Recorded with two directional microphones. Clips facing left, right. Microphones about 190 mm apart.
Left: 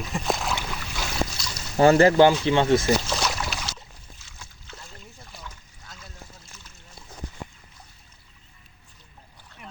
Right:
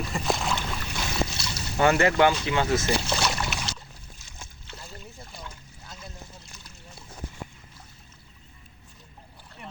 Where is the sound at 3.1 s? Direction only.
Centre (ahead or behind).